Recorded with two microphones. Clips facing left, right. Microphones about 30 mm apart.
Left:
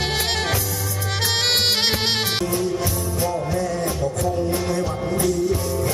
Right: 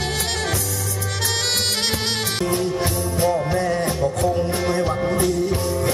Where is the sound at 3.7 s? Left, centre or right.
Right.